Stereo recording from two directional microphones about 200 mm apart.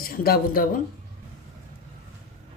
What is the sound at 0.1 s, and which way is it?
Speech, 45° left (ahead or behind).